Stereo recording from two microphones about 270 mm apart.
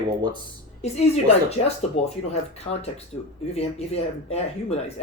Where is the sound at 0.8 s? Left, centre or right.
Left.